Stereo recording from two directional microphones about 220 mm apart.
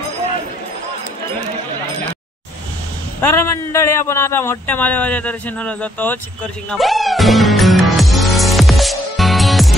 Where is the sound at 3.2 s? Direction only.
10° left (ahead or behind).